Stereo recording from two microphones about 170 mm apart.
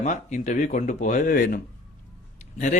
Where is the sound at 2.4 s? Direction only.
45° left (ahead or behind).